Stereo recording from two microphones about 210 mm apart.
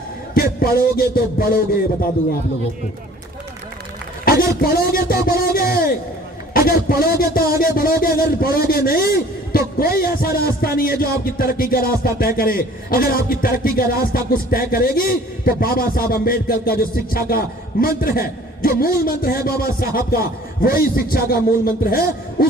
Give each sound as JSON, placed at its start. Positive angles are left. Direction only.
{"t": 0.3, "sound": "a man's voice", "side_deg": 45}
{"t": 4.3, "sound": "a man's voice", "side_deg": 45}